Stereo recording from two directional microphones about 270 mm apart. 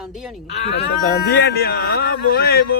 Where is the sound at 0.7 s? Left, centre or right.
Left.